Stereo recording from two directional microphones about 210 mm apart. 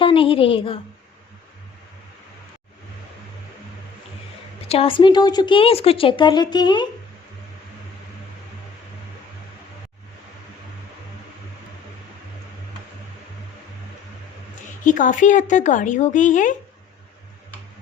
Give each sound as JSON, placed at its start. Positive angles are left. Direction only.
{"t": 0.0, "sound": "a woman's voice", "side_deg": 25}
{"t": 4.7, "sound": "speech", "side_deg": 25}
{"t": 14.8, "sound": "speech", "side_deg": 40}